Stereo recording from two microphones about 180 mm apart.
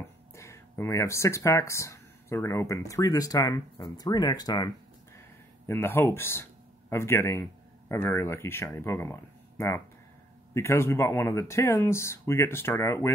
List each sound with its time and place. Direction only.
0.4 s speech: 15° left (ahead or behind)
5.7 s speech: 15° left (ahead or behind)